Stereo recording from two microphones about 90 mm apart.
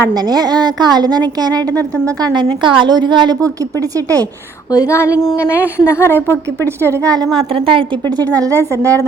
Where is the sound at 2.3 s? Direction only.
65° right (ahead or behind).